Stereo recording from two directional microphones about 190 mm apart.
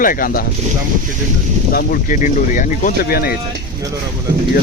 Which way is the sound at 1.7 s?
45° left (ahead or behind).